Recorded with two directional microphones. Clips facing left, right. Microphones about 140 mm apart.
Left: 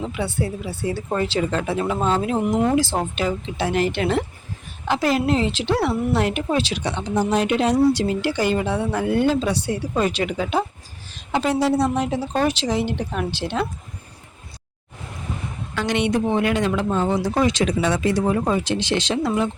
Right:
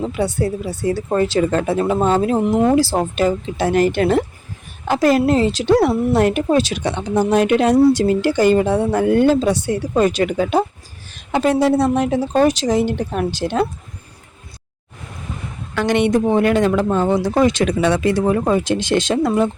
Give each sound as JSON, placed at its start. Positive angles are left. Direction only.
{"t": 0.0, "sound": "a woman's voice", "side_deg": -40}
{"t": 12.5, "sound": "speech", "side_deg": -45}
{"t": 15.7, "sound": "speech", "side_deg": -55}